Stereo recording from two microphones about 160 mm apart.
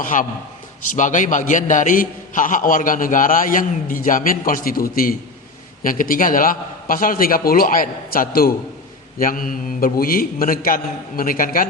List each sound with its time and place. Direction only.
0.0 s a man's voice: 55° left (ahead or behind)